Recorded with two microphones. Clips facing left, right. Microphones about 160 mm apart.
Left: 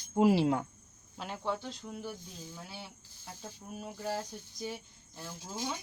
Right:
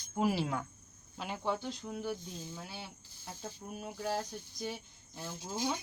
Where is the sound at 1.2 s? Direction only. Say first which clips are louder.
Even; centre (ahead or behind).